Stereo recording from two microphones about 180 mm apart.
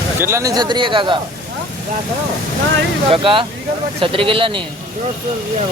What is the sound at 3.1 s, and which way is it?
Speech, 30° right (ahead or behind).